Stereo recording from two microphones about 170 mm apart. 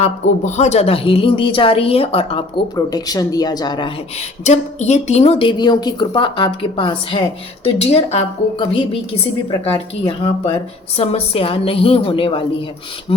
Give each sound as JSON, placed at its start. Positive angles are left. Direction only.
{"t": 0.0, "sound": "a woman's voice", "side_deg": 40}
{"t": 2.7, "sound": "speech", "side_deg": 20}
{"t": 4.4, "sound": "a woman's voice", "side_deg": 45}